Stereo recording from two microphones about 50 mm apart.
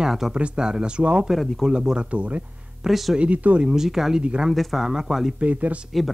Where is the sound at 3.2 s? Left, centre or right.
Right.